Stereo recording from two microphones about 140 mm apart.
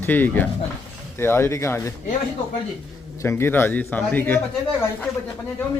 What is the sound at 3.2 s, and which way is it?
Speech, 20° left (ahead or behind).